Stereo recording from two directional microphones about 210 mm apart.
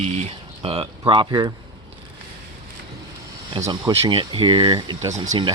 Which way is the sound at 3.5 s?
20° right (ahead or behind).